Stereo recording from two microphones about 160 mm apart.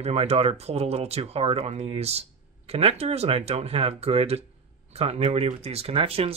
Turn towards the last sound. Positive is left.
turn(degrees=-35)  # may be behind; listen again after turning